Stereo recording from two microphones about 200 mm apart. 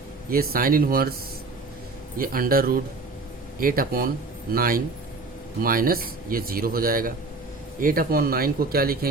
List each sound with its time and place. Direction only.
0.3 s speech: 45° right (ahead or behind)
2.1 s speech: 45° right (ahead or behind)